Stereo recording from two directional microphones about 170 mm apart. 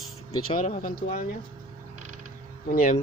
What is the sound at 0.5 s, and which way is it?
Speech, 50° left (ahead or behind).